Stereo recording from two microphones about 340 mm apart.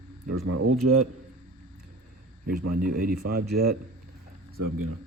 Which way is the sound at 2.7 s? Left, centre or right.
Right.